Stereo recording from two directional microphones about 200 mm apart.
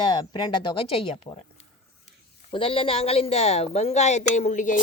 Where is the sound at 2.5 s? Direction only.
25° left (ahead or behind).